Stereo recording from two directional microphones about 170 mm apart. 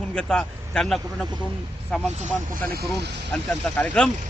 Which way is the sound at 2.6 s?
65° right (ahead or behind).